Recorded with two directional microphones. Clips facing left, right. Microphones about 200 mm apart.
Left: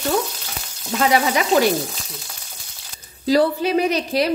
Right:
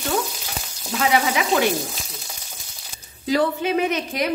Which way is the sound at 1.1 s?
40° left (ahead or behind).